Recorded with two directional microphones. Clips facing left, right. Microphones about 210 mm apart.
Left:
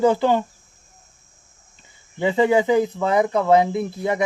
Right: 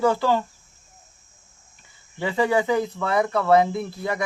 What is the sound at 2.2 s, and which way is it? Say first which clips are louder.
Speech: left 4 dB; 20° left (ahead or behind).